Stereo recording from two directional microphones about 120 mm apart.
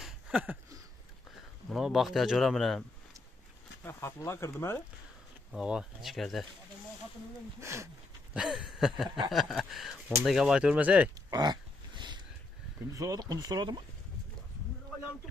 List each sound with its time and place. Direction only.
0.0 s a sound: 10° right (ahead or behind)
1.7 s speech: centre (ahead or behind)
3.8 s speech: 20° left (ahead or behind)
5.5 s speech: 5° right (ahead or behind)
7.6 s speech: 25° right (ahead or behind)
8.3 s speech: 5° right (ahead or behind)
11.2 s a sound: 35° right (ahead or behind)
12.9 s speech: 30° right (ahead or behind)